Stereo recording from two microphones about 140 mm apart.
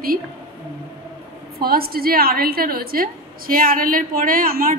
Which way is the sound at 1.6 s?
90° right.